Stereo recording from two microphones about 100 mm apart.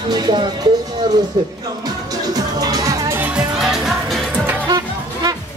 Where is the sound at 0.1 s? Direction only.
50° right (ahead or behind).